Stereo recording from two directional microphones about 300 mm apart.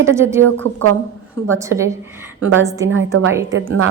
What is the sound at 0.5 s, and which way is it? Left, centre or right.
Speech, right.